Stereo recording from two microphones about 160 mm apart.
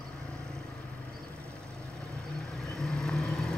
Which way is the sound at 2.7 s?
5° left (ahead or behind).